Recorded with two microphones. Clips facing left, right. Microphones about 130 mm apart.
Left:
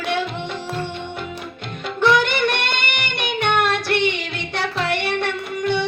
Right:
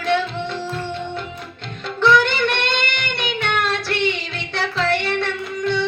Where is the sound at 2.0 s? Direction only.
15° left (ahead or behind).